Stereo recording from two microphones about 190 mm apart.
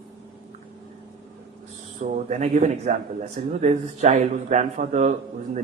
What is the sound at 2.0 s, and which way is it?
Speech, 40° right (ahead or behind).